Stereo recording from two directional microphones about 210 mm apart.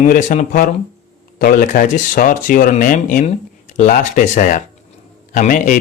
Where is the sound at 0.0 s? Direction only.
40° left (ahead or behind).